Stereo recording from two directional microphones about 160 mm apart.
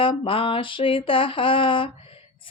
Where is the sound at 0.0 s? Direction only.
35° left (ahead or behind).